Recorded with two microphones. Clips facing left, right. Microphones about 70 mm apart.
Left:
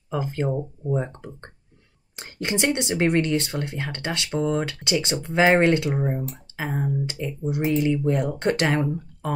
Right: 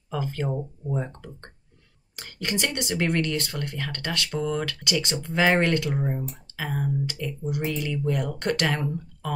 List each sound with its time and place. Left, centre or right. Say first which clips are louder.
0.1 s speech: left 3 dB; left